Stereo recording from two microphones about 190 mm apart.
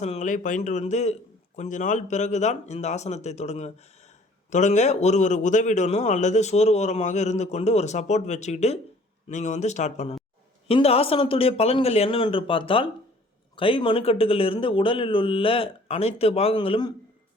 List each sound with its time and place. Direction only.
0.0 s a man's voice: 40° left (ahead or behind)